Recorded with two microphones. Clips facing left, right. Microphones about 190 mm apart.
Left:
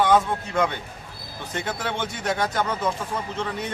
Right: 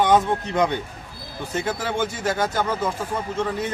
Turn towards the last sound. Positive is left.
turn(degrees=-5)  # may be behind; listen again after turning